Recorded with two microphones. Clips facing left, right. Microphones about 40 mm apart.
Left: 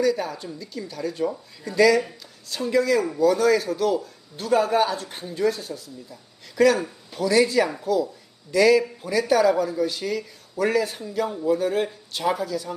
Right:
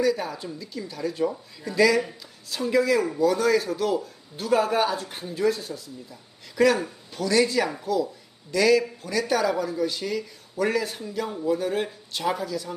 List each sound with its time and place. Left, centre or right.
0.0 s speech: centre